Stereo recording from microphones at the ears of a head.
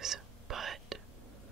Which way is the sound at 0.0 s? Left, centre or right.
Right.